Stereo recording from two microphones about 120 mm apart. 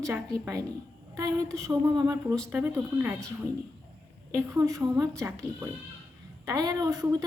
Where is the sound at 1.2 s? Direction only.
30° right (ahead or behind).